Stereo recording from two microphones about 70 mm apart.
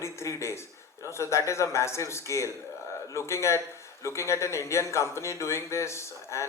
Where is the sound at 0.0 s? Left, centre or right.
Left.